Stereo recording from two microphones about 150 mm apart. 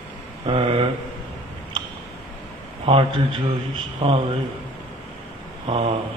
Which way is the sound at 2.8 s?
35° right (ahead or behind).